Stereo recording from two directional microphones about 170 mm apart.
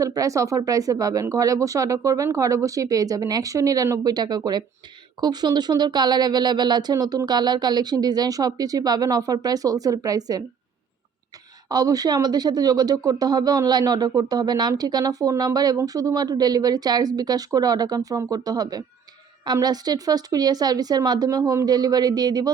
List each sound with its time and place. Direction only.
0.0 s speech: 20° right (ahead or behind)
11.7 s speech: 20° right (ahead or behind)